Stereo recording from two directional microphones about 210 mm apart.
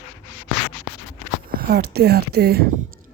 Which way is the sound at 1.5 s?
45° right (ahead or behind).